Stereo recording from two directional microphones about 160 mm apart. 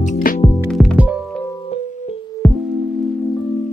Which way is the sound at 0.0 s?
55° left (ahead or behind).